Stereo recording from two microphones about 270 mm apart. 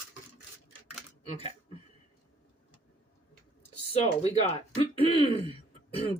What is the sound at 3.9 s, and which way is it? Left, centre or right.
Speech, left.